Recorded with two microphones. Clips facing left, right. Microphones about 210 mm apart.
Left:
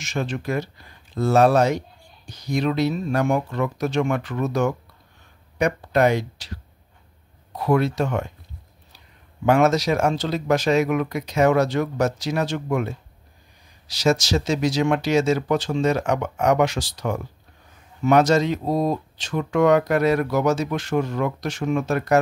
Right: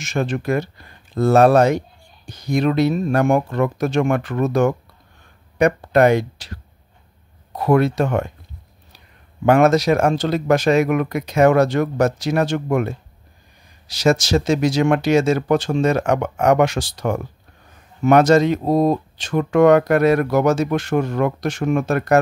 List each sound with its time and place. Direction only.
0.0 s speech: 55° right (ahead or behind)
7.5 s speech: 55° right (ahead or behind)
9.5 s speech: 55° right (ahead or behind)